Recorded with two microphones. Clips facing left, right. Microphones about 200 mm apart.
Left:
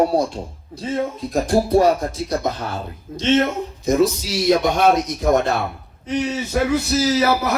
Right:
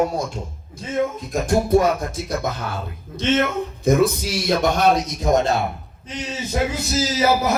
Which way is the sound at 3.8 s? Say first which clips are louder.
Even; 55° right (ahead or behind).